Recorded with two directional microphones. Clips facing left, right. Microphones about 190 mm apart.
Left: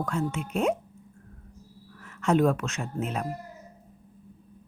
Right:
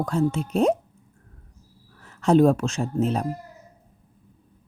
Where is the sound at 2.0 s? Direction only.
35° right (ahead or behind).